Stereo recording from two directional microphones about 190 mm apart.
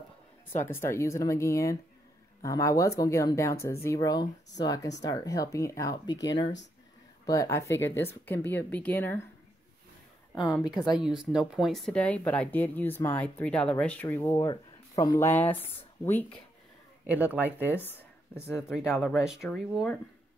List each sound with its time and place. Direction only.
0.7 s speech: 15° left (ahead or behind)
10.6 s speech: centre (ahead or behind)
17.0 s speech: 10° right (ahead or behind)
17.7 s a sound: 10° left (ahead or behind)
18.7 s speech: 5° right (ahead or behind)